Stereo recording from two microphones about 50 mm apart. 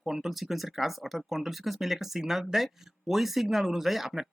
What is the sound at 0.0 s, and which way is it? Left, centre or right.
Speech, centre.